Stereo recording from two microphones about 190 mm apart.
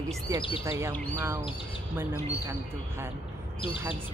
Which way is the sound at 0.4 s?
30° left (ahead or behind).